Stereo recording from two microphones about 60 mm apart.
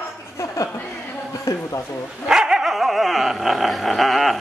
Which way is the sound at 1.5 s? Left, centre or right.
Left.